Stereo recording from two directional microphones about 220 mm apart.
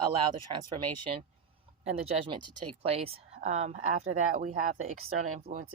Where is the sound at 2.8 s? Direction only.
25° right (ahead or behind).